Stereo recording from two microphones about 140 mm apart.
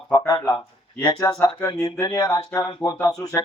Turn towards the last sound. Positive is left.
turn(degrees=25)  # may be behind; listen again after turning